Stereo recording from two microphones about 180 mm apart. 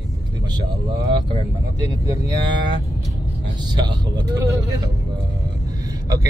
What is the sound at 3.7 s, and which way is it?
Speech, 25° right (ahead or behind).